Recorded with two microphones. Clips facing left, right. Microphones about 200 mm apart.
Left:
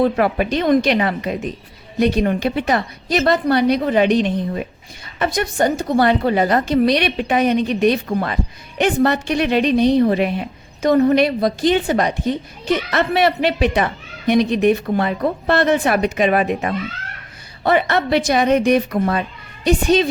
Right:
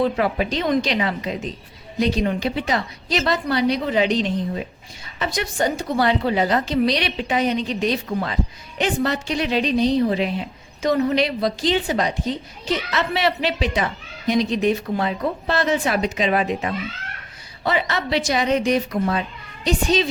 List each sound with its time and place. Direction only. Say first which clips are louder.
0.0 s a woman's voice: left 4 dB; 55° left (ahead or behind)